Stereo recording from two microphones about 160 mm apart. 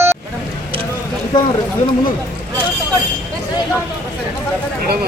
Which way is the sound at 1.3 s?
25° left (ahead or behind).